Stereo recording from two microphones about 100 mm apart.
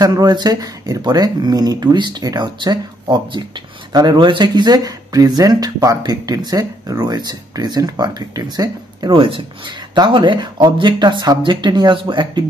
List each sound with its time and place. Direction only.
0.0 s speech: 45° right (ahead or behind)